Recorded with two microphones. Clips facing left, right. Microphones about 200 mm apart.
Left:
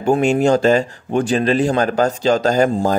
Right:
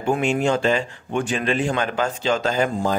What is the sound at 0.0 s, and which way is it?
Speech, 40° left (ahead or behind).